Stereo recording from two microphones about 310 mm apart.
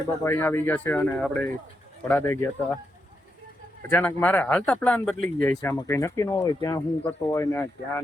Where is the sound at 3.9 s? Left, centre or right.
Centre.